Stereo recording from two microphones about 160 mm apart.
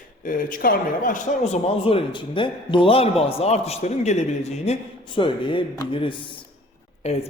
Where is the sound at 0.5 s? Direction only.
60° left (ahead or behind).